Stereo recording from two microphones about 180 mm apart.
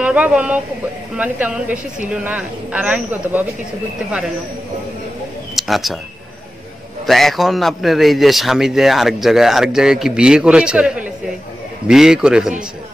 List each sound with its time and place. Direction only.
0.0 s a woman's voice: 5° right (ahead or behind)
5.6 s a sound: centre (ahead or behind)
7.1 s speech: centre (ahead or behind)